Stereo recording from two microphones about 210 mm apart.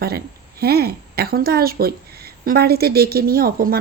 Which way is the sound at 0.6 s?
50° right (ahead or behind).